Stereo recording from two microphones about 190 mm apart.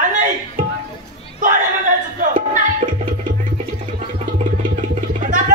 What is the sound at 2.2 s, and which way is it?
Music, 40° right (ahead or behind).